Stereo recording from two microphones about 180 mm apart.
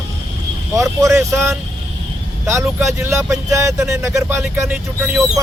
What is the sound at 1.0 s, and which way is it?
Speech, 15° right (ahead or behind).